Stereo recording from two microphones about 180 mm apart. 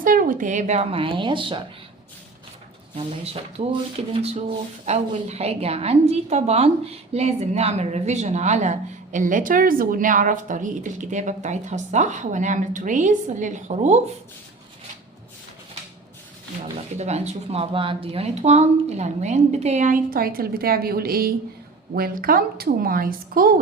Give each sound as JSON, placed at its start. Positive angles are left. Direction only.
{"t": 0.0, "sound": "speech", "side_deg": -50}
{"t": 2.9, "sound": "speech", "side_deg": -35}
{"t": 17.0, "sound": "a woman's voice", "side_deg": -40}